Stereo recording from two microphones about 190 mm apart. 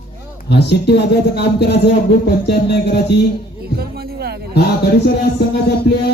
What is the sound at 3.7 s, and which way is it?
Music, 55° right (ahead or behind).